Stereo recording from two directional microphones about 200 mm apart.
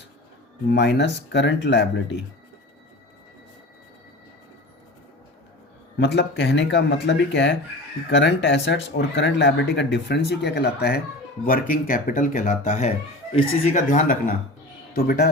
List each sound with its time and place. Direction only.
0.7 s speech: 60° left (ahead or behind)
6.1 s speech: 60° left (ahead or behind)